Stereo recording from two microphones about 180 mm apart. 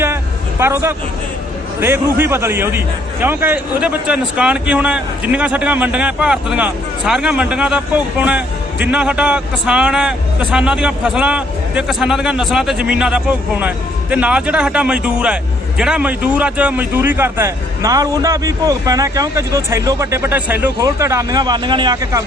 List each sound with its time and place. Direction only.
0.6 s a man's voice: 15° right (ahead or behind)